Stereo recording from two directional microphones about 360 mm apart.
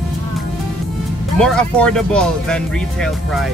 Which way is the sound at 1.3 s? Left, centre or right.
Centre.